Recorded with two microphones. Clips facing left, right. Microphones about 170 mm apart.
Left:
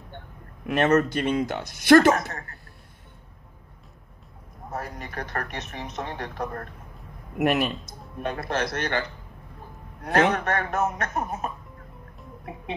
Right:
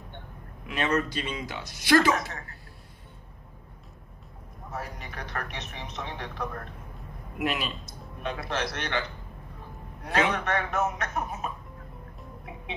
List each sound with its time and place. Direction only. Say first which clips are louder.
0.7 s a man's voice: left 7 dB; 50° left (ahead or behind)
4.7 s a man's voice: left 4 dB; 50° left (ahead or behind)
10.0 s a man's voice: left 5 dB; 50° left (ahead or behind)